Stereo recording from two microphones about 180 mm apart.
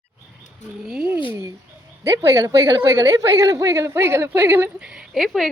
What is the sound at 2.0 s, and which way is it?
A woman's voice, 15° right (ahead or behind).